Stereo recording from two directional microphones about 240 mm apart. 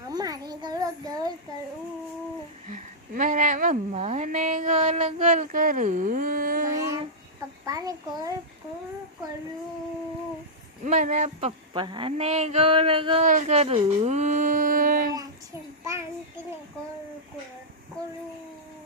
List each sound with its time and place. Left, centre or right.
0.1 s a sound: centre
2.6 s speech: right
7.6 s a child's voice: centre
10.8 s speech: right
15.8 s child singing: centre